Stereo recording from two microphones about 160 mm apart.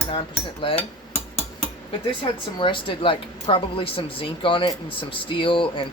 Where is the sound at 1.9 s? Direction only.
35° left (ahead or behind).